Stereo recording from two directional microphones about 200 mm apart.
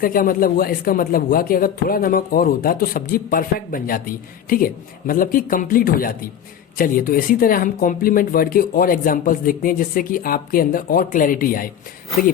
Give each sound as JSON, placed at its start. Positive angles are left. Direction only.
{"t": 0.0, "sound": "speech", "side_deg": 45}